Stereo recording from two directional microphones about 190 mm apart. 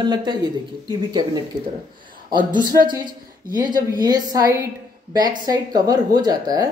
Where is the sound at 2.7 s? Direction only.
25° right (ahead or behind).